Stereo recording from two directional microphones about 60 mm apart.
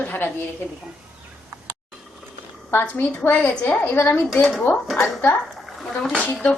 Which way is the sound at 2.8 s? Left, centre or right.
Left.